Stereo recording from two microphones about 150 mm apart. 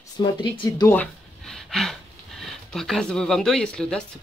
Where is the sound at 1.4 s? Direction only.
5° left (ahead or behind).